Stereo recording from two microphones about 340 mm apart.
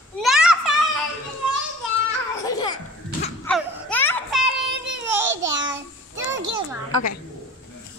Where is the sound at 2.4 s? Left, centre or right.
Centre.